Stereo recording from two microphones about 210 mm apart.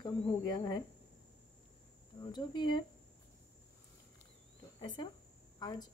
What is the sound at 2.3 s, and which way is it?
Speech, 20° left (ahead or behind).